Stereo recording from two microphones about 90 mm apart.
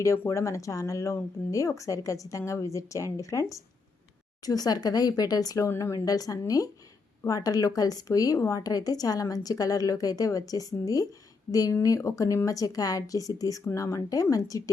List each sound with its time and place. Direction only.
0.3 s a woman's voice: 35° left (ahead or behind)